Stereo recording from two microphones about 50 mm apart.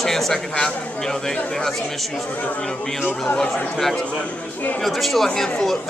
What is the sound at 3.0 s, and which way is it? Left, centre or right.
Speech, left.